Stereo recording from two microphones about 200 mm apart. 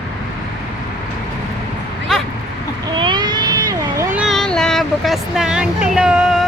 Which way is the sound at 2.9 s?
25° right (ahead or behind).